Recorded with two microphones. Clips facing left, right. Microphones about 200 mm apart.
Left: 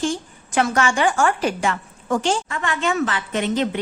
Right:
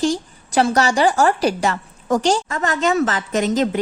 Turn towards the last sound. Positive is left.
turn(degrees=-40)  # may be behind; listen again after turning